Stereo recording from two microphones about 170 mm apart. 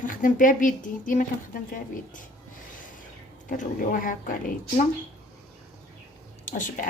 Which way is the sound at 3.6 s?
50° left (ahead or behind).